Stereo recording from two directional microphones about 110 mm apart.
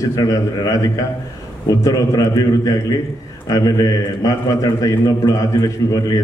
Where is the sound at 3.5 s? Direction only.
35° left (ahead or behind).